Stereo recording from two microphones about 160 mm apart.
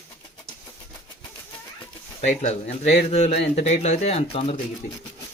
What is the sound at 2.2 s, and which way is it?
Speech, 45° left (ahead or behind).